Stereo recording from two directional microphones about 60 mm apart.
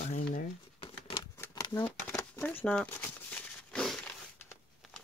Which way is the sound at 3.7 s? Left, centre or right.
Centre.